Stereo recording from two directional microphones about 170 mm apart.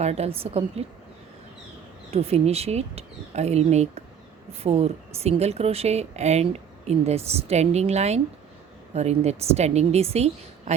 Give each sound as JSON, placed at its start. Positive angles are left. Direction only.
{"t": 0.0, "sound": "a woman's voice", "side_deg": -35}
{"t": 2.0, "sound": "a woman's voice", "side_deg": -35}